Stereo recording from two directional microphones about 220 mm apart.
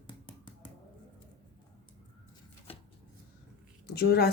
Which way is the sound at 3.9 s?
45° left (ahead or behind).